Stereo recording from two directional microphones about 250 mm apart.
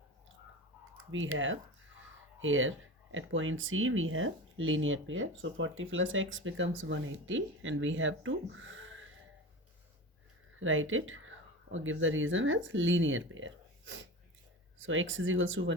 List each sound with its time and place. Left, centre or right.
1.1 s speech: right
10.6 s speech: right